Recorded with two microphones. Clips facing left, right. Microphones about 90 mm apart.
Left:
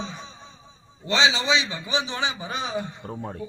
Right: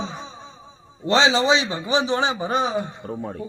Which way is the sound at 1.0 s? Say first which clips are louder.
Right 5 dB; 45° right (ahead or behind).